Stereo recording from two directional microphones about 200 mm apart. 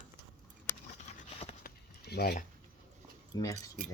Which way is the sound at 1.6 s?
50° left (ahead or behind).